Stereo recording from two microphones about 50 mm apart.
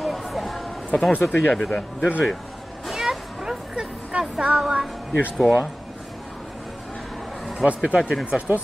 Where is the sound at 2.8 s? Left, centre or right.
Centre.